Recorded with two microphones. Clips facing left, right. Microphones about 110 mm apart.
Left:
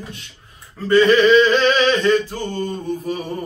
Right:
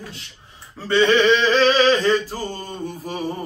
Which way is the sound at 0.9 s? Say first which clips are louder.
Left 4 dB; 30° right (ahead or behind).